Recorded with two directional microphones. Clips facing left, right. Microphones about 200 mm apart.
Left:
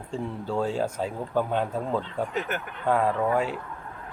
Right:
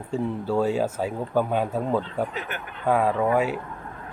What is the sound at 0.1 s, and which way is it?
A man's voice, 5° right (ahead or behind).